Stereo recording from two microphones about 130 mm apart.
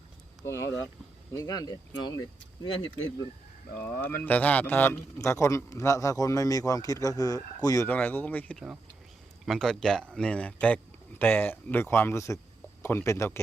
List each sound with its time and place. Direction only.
0.4 s a man's voice: 20° left (ahead or behind)
3.8 s a man's voice: 15° left (ahead or behind)
7.9 s speech: 15° left (ahead or behind)
8.5 s speech: 5° right (ahead or behind)
9.5 s speech: 5° left (ahead or behind); by 13.4 s 20° left (ahead or behind)